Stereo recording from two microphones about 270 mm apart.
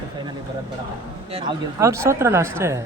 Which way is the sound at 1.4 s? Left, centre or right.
Centre.